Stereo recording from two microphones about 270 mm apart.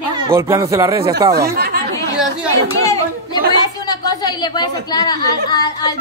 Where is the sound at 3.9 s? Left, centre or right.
Centre.